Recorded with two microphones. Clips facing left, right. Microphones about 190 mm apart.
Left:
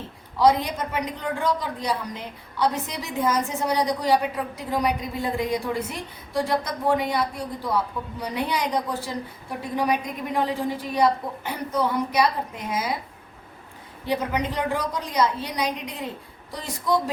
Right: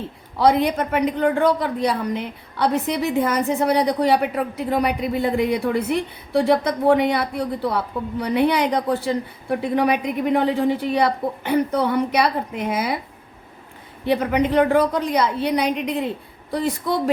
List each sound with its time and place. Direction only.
0.3 s a woman's voice: 60° right (ahead or behind)
14.0 s a woman's voice: 60° right (ahead or behind)